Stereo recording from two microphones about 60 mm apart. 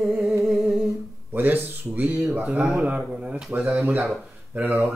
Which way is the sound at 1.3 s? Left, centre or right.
Right.